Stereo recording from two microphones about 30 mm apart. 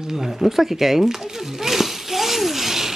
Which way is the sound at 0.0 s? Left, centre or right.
Centre.